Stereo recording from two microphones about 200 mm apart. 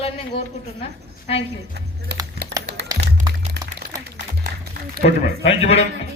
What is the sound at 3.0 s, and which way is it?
Music, 55° right (ahead or behind).